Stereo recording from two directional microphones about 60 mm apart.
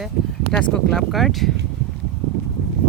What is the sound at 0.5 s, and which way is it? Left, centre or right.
Speech, centre.